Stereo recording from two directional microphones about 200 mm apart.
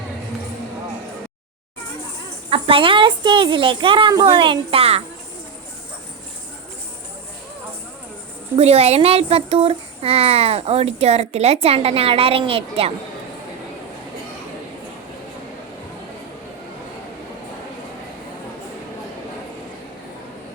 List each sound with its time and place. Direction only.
2.5 s a woman's voice: 25° right (ahead or behind)
8.5 s a child's voice: 30° right (ahead or behind)